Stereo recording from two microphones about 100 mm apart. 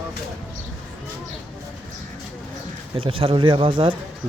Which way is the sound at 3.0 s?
65° right (ahead or behind).